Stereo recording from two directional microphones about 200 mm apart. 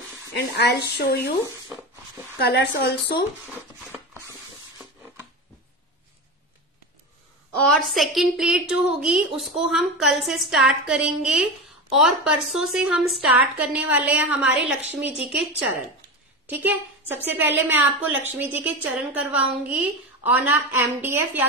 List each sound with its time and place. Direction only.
0.3 s a woman's voice: 60° left (ahead or behind)
2.3 s a woman's voice: 55° left (ahead or behind)
3.9 s a sound: 10° right (ahead or behind)
7.6 s a woman's voice: centre (ahead or behind)
16.4 s a woman's voice: 10° right (ahead or behind)